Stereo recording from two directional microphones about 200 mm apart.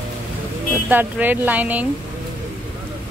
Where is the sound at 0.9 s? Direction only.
10° right (ahead or behind).